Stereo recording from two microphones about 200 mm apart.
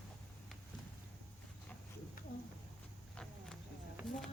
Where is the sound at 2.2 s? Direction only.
45° left (ahead or behind).